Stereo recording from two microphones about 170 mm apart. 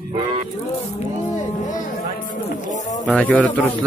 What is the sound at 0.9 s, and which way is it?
Speech, 45° left (ahead or behind).